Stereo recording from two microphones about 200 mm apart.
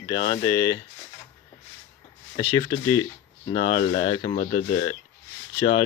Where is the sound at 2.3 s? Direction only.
20° left (ahead or behind).